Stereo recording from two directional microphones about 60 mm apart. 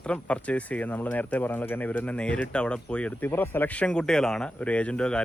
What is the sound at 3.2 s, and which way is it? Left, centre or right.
A man's voice, left.